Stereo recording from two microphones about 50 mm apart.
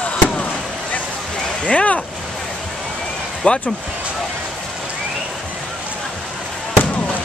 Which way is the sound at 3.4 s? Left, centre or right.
Left.